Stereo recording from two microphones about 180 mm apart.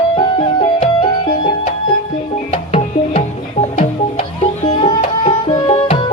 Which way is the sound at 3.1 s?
40° left (ahead or behind).